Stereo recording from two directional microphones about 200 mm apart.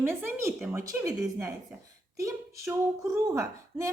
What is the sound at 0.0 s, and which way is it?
A woman's voice, 10° right (ahead or behind).